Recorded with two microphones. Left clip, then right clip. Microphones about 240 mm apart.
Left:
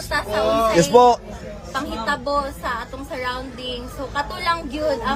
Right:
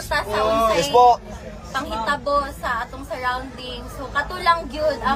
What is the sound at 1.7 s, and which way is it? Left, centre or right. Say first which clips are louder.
Speech: right 1 dB; centre.